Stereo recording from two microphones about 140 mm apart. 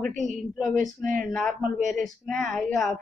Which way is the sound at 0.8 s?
70° right (ahead or behind).